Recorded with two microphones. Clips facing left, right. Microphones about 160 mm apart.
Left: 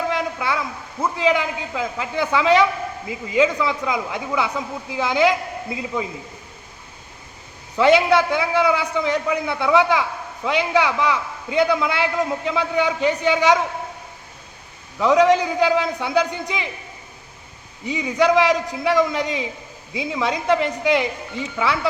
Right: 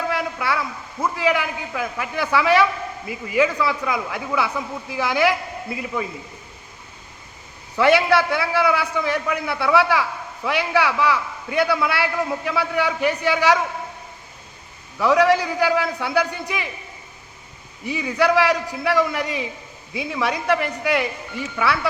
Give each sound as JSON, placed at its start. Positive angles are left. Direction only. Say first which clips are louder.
{"t": 0.1, "sound": "a sound", "louder": "left 1 dB", "side_deg": 20}
{"t": 1.0, "sound": "a man's voice", "louder": "left 1 dB", "side_deg": 20}
{"t": 7.8, "sound": "a man's voice", "louder": "left 1 dB", "side_deg": 20}
{"t": 14.9, "sound": "a man's voice", "louder": "left 1 dB", "side_deg": 20}
{"t": 17.8, "sound": "a man's voice", "louder": "left 1 dB", "side_deg": 20}